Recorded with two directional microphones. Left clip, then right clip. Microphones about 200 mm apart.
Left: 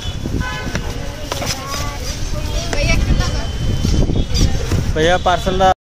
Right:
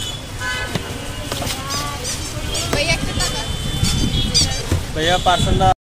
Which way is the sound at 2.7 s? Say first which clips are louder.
Right 1 dB; 50° left (ahead or behind).